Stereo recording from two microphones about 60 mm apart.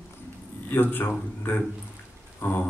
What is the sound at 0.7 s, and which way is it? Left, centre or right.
Speech, left.